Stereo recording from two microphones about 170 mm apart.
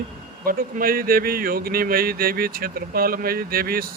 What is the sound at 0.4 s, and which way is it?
Speech, 60° right (ahead or behind).